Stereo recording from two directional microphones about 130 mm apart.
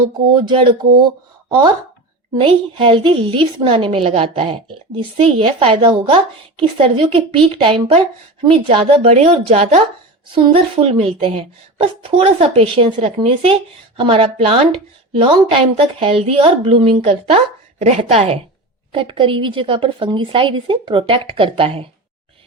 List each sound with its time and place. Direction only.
0.3 s a woman's voice: 40° right (ahead or behind)
2.4 s a woman's voice: 40° right (ahead or behind)
10.3 s a woman's voice: 45° right (ahead or behind)
18.9 s a woman's voice: 40° right (ahead or behind)